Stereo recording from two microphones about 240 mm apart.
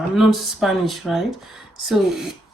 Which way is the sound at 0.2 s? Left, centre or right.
Centre.